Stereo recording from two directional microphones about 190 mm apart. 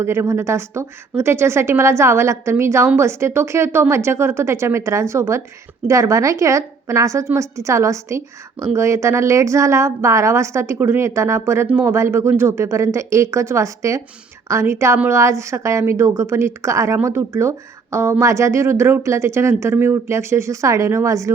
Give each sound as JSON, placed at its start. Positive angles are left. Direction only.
{"t": 0.0, "sound": "a woman's voice", "side_deg": -15}